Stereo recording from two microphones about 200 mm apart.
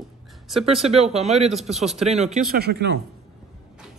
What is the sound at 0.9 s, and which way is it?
Speech, 30° right (ahead or behind).